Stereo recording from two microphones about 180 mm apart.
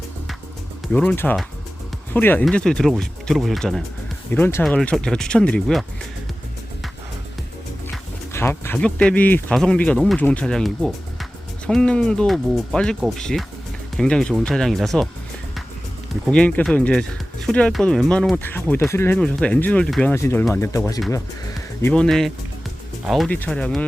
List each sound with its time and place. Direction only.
0.9 s speech: 10° left (ahead or behind)
8.3 s speech: 15° left (ahead or behind)
16.3 s speech: 5° left (ahead or behind)